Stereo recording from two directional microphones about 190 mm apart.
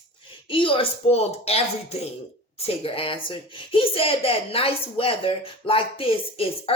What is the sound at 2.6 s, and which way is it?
Speech, 30° left (ahead or behind).